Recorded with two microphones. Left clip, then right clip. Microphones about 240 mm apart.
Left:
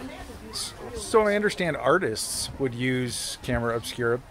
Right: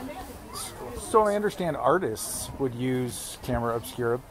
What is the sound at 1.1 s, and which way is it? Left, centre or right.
Speech, left.